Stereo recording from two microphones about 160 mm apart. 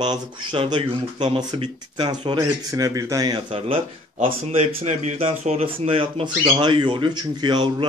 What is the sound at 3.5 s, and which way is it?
A man's voice, 40° right (ahead or behind).